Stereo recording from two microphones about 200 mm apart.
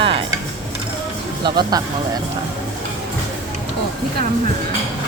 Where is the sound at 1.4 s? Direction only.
20° right (ahead or behind).